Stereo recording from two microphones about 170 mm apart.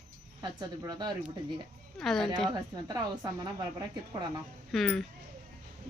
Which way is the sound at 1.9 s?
Centre (ahead or behind).